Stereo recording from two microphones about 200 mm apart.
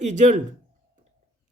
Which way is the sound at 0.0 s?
35° right (ahead or behind).